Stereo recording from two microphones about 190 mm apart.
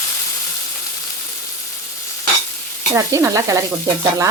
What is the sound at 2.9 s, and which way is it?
Speech, 15° right (ahead or behind).